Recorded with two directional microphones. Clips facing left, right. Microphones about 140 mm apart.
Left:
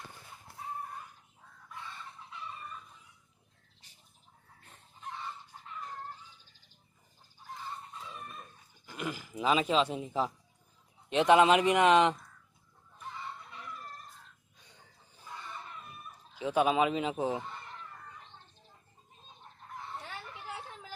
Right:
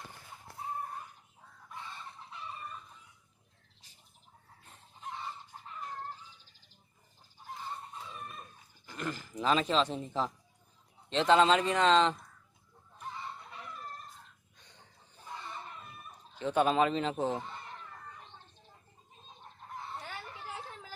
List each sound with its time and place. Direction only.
8.9 s speech: 10° left (ahead or behind)
16.3 s speech: 5° left (ahead or behind)